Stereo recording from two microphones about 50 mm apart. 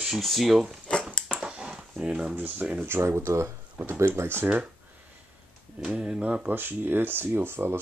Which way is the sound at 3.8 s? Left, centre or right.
Right.